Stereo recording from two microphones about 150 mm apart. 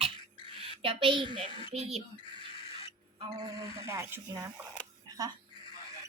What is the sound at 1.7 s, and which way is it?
Speech, 45° right (ahead or behind).